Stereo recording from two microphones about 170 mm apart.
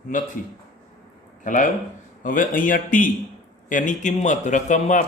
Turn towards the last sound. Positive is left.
turn(degrees=45)  # may be behind; listen again after turning